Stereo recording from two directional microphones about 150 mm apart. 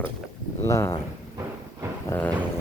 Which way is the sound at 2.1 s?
10° left (ahead or behind).